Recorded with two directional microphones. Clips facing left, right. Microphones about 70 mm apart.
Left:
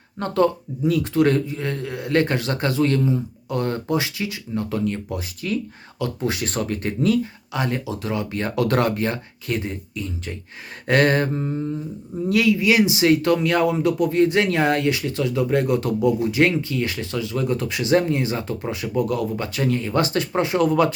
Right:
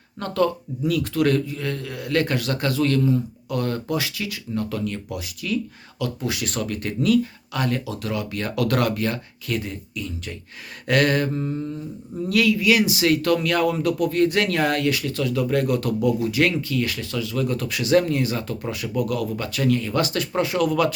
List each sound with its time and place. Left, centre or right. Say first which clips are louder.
0.2 s speech: left 2 dB; left